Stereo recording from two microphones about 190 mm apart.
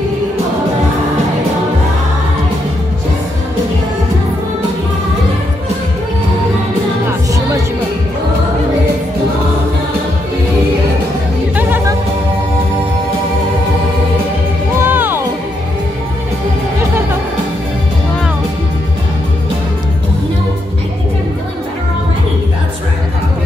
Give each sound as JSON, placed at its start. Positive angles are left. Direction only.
{"t": 7.1, "sound": "music", "side_deg": -15}
{"t": 14.8, "sound": "music", "side_deg": -10}